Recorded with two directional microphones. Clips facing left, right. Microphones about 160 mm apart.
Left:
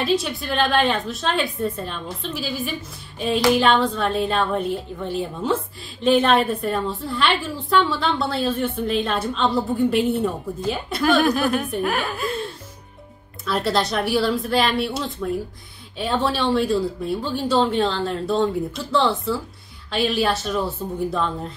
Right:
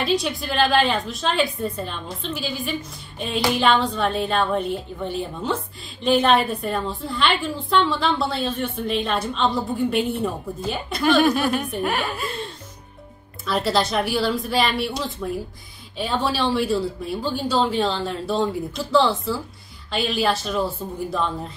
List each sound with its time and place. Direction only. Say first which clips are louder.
0.0 s a woman's voice: left 1 dB; centre (ahead or behind)
13.5 s a woman's voice: even; centre (ahead or behind)